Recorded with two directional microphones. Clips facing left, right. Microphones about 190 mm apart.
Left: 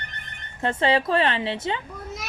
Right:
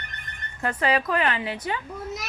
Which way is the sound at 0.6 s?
25° left (ahead or behind).